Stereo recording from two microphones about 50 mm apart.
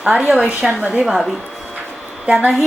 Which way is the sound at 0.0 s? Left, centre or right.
Centre.